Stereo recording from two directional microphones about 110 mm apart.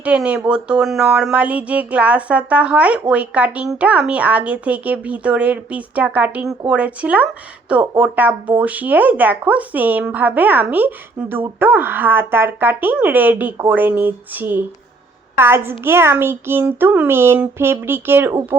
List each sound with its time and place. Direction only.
0.0 s a child's voice: 10° right (ahead or behind)